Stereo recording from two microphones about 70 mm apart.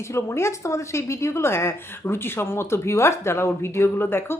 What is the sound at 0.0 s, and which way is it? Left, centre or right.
Speech, left.